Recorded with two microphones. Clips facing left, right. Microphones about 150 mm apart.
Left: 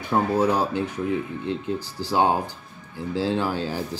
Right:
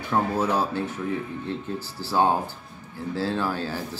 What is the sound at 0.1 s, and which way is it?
Speech, 15° left (ahead or behind).